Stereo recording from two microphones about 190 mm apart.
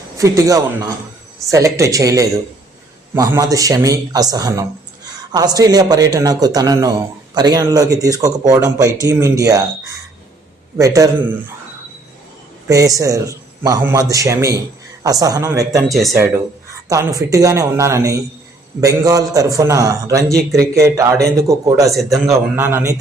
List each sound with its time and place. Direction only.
0.2 s a man's voice: 15° right (ahead or behind)
12.6 s a man's voice: 15° right (ahead or behind)
15.9 s speech: centre (ahead or behind)
16.1 s a man's voice: 15° right (ahead or behind)